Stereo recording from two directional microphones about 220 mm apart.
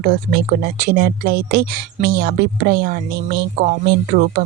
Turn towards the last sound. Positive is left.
turn(degrees=-45)  # may be behind; listen again after turning